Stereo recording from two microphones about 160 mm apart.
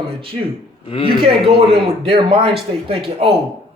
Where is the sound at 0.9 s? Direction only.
35° left (ahead or behind).